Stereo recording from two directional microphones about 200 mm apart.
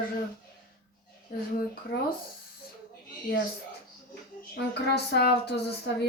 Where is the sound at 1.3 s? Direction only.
50° left (ahead or behind).